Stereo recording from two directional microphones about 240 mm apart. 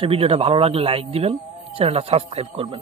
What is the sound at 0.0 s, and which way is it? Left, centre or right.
Speech, right.